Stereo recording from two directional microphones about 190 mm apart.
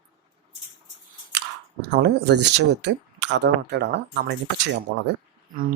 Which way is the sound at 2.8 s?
65° right (ahead or behind).